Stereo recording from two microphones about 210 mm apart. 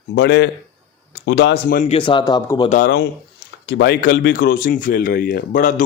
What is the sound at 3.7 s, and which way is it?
Speech, 60° left (ahead or behind).